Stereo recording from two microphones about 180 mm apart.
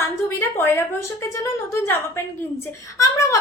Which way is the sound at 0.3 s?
15° left (ahead or behind).